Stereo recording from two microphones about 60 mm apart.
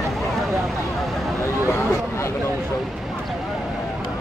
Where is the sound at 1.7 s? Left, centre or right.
Left.